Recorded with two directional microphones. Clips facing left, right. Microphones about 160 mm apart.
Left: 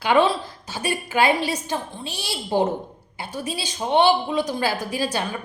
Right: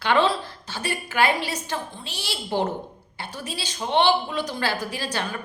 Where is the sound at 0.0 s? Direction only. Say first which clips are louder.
Left 2 dB; 15° left (ahead or behind).